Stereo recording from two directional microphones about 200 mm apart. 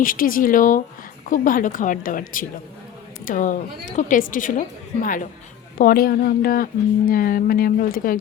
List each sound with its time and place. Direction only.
0.0 s a woman's voice: 45° left (ahead or behind)